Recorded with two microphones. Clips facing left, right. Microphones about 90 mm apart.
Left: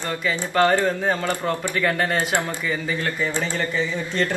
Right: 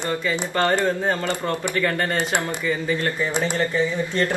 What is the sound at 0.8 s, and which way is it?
Speech, 20° right (ahead or behind).